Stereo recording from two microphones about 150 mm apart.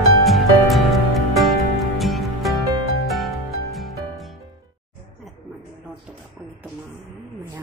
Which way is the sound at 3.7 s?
Centre (ahead or behind).